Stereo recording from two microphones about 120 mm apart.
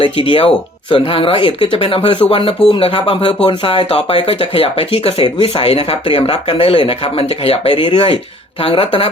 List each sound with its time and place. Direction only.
0.0 s speech: 45° left (ahead or behind)